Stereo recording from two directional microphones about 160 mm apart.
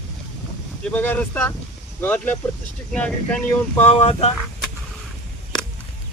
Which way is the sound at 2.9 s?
5° left (ahead or behind).